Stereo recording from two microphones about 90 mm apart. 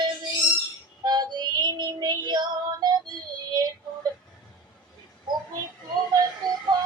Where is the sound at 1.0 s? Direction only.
50° right (ahead or behind).